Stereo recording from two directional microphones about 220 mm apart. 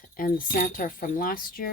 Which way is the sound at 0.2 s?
40° left (ahead or behind).